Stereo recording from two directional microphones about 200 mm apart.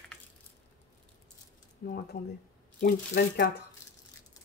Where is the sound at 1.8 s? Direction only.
45° left (ahead or behind).